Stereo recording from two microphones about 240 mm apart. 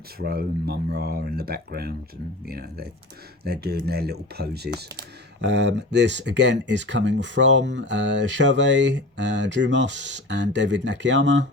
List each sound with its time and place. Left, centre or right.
0.2 s speech: right